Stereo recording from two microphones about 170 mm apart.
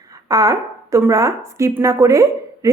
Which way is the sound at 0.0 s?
20° right (ahead or behind).